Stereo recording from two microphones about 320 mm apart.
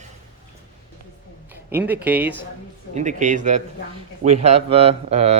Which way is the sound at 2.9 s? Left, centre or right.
Right.